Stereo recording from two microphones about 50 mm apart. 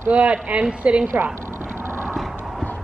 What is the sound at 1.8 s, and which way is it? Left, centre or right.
Vehicle, right.